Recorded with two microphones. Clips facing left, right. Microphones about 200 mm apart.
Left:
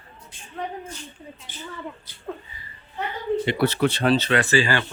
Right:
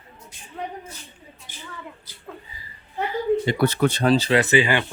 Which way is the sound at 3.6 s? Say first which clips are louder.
Right 1 dB; 45° right (ahead or behind).